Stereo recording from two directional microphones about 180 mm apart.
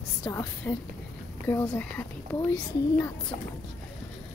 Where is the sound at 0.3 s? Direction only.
15° left (ahead or behind).